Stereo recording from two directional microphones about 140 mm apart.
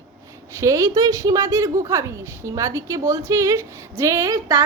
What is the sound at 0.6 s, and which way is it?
A woman's voice, 20° right (ahead or behind).